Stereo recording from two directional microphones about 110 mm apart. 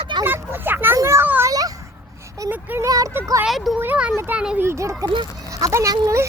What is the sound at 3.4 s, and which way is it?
Speech, centre (ahead or behind).